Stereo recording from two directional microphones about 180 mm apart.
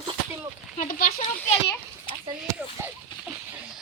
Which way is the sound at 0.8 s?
55° left (ahead or behind).